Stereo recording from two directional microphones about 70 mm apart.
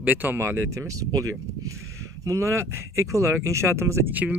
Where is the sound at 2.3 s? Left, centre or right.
Right.